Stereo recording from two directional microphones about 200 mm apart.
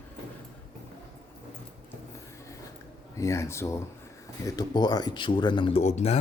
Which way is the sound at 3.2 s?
15° left (ahead or behind).